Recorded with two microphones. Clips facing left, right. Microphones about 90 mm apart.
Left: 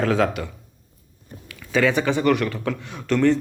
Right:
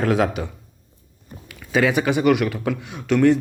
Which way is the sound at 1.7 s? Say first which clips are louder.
Right 1 dB; 10° right (ahead or behind).